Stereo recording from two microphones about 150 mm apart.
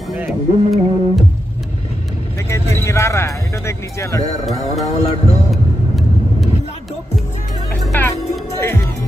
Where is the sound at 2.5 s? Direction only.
15° left (ahead or behind).